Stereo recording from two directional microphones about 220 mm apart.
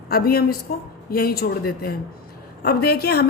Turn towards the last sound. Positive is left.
turn(degrees=45)  # may be behind; listen again after turning